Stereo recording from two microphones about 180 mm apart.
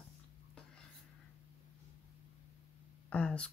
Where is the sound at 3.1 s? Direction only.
5° left (ahead or behind).